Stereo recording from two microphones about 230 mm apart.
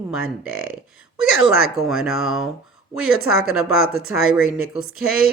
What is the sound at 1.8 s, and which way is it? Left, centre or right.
Speech, centre.